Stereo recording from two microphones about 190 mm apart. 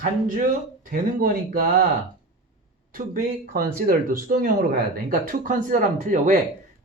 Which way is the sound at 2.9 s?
45° right (ahead or behind).